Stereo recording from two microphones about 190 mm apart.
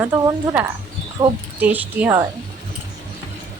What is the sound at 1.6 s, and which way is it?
Speech, 10° right (ahead or behind).